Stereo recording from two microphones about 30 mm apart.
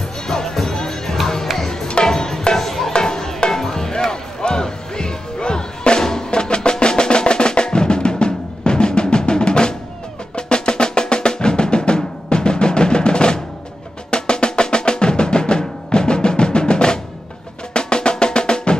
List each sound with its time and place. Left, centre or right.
0.3 s music: centre
4.1 s music: left
10.3 s drum: left
17.7 s music: left